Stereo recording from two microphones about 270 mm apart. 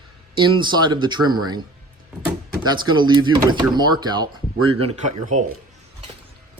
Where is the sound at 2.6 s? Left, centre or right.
Centre.